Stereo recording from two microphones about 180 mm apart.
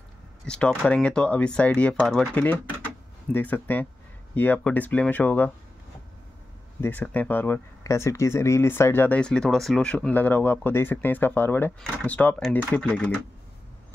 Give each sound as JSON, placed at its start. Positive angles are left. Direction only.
{"t": 0.5, "sound": "speech", "side_deg": 5}
{"t": 6.8, "sound": "speech", "side_deg": 10}